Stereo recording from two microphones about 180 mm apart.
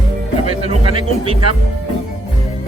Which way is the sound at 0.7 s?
30° right (ahead or behind).